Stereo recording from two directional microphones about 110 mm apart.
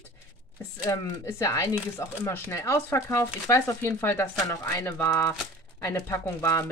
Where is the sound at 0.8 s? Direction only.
30° left (ahead or behind).